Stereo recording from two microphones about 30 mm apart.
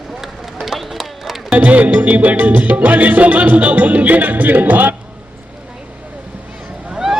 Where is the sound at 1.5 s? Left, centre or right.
Right.